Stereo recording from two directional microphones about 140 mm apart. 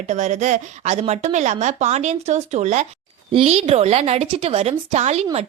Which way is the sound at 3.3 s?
45° right (ahead or behind).